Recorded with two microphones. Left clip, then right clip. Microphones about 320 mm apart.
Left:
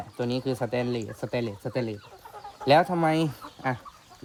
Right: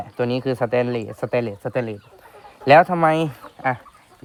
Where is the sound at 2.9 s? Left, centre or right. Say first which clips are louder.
Right 7 dB; centre.